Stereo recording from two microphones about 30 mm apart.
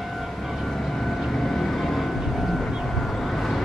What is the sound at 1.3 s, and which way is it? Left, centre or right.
Vehicle, centre.